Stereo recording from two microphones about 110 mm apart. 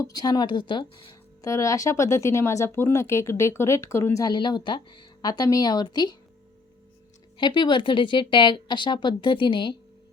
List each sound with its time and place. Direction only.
0.0 s speech: 35° left (ahead or behind)
1.4 s speech: 30° left (ahead or behind)
7.3 s speech: 45° left (ahead or behind)